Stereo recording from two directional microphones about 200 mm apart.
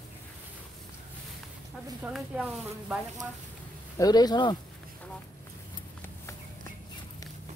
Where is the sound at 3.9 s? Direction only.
20° left (ahead or behind).